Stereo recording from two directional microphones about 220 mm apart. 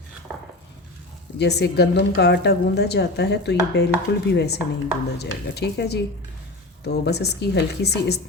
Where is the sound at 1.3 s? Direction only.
50° left (ahead or behind).